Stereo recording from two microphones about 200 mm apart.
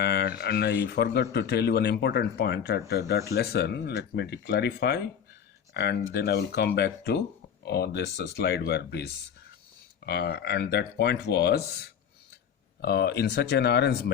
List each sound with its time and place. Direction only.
0.0 s speech: 55° left (ahead or behind)
10.1 s speech: 55° left (ahead or behind)